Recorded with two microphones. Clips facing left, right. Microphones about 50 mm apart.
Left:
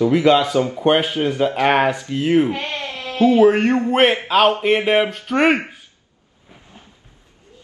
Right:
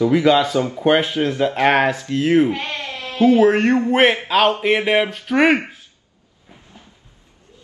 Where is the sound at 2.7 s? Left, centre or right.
Left.